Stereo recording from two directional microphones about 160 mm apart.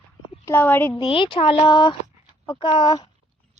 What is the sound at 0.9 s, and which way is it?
Speech, 30° left (ahead or behind).